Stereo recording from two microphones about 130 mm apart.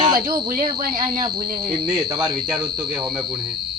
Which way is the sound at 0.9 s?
40° right (ahead or behind).